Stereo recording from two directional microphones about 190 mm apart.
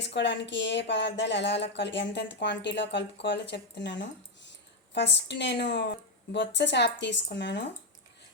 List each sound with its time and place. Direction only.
0.0 s speech: 65° left (ahead or behind)